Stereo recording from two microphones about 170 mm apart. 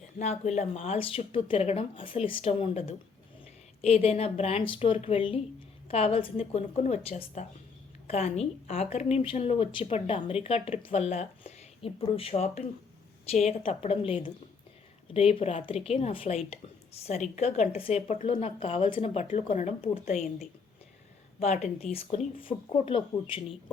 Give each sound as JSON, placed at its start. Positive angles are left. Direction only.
{"t": 0.2, "sound": "a woman's voice", "side_deg": 40}
{"t": 21.3, "sound": "a woman's voice", "side_deg": 40}